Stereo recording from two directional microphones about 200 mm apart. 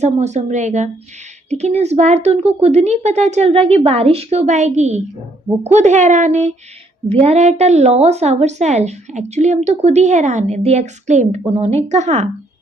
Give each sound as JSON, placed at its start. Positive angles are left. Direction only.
{"t": 0.0, "sound": "a woman's voice", "side_deg": -35}